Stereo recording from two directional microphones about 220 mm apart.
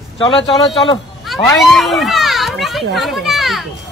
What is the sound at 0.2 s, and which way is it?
Speech, 25° left (ahead or behind).